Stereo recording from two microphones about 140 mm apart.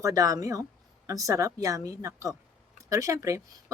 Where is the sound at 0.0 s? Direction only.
25° right (ahead or behind).